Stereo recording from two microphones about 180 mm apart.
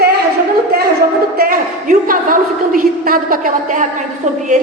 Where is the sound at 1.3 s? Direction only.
50° right (ahead or behind).